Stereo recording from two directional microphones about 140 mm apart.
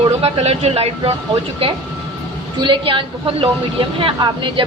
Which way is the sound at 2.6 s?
35° right (ahead or behind).